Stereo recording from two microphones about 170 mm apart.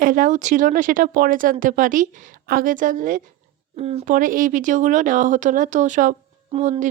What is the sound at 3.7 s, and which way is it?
Speech, 40° right (ahead or behind).